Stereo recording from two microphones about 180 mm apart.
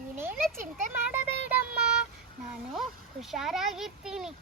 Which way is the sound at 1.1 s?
10° right (ahead or behind).